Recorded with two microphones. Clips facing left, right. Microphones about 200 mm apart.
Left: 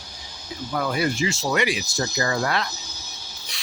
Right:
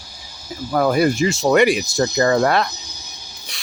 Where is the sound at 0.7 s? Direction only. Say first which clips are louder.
Right 8 dB; 50° right (ahead or behind).